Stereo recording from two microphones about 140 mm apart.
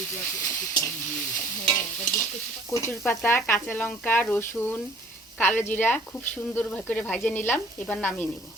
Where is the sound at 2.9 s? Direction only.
15° left (ahead or behind).